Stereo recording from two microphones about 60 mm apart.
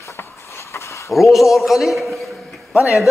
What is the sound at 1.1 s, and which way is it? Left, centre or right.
Speech, centre.